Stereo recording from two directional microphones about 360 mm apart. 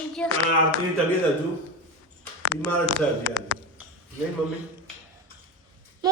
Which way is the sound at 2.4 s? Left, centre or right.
Right.